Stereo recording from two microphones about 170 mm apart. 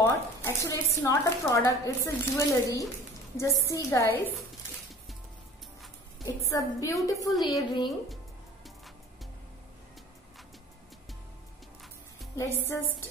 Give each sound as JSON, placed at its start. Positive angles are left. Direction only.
{"t": 0.0, "sound": "speech", "side_deg": 15}
{"t": 6.2, "sound": "a woman's voice", "side_deg": 20}
{"t": 12.4, "sound": "speech", "side_deg": 15}